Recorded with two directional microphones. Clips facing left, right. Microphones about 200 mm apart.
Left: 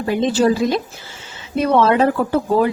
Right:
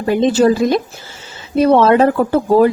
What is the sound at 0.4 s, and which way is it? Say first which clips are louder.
A woman's voice: right 2 dB; 50° right (ahead or behind).